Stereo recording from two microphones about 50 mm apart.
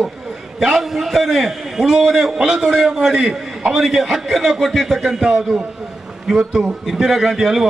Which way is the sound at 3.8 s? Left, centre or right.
Centre.